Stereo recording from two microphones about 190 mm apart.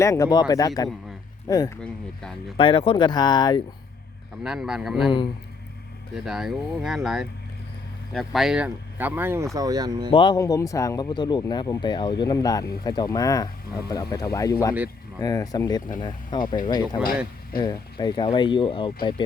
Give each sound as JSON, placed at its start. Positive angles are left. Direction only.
{"t": 0.0, "sound": "speech", "side_deg": 15}
{"t": 1.8, "sound": "speech", "side_deg": 5}
{"t": 2.6, "sound": "speech", "side_deg": 25}
{"t": 4.4, "sound": "speech", "side_deg": -5}
{"t": 6.1, "sound": "speech", "side_deg": 0}
{"t": 10.1, "sound": "speech", "side_deg": 25}